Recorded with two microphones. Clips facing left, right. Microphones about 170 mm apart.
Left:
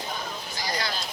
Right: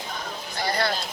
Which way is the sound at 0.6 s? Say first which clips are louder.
Right 6 dB; 60° right (ahead or behind).